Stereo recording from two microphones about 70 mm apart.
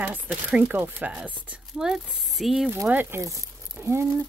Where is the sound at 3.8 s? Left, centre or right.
Right.